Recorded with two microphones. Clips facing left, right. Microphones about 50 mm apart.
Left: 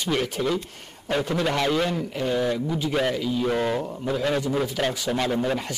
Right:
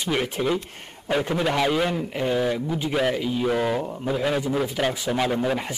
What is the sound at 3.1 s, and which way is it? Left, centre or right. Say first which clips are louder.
Speech: even; centre.